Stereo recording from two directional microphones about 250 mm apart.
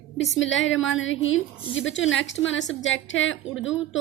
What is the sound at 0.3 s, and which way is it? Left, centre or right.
A woman's voice, left.